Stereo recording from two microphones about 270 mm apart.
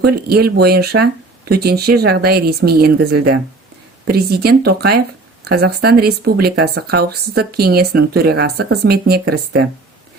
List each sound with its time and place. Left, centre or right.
0.0 s speech: right